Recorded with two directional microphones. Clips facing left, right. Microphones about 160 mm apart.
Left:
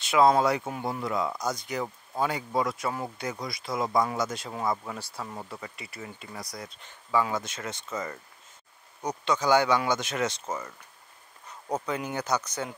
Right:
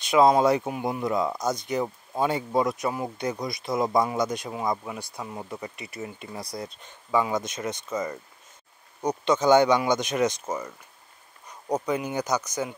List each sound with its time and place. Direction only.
0.0 s speech: 20° right (ahead or behind)